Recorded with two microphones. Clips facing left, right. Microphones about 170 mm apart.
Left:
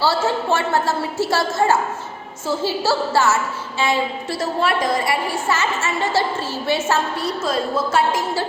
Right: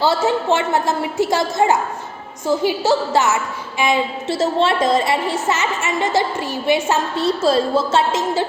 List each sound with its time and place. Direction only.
0.0 s a woman's voice: 20° right (ahead or behind)